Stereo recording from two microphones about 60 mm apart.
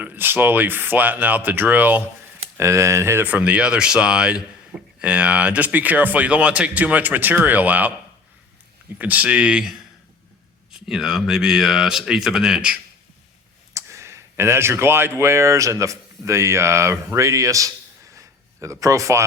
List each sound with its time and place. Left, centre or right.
0.0 s speech: right
2.6 s speech: right
3.2 s speech: right
9.0 s speech: right
13.7 s speech: right
18.1 s a sound: right